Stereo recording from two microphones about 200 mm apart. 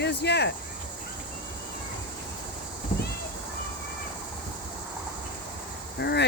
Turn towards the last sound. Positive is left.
turn(degrees=55)  # may be behind; listen again after turning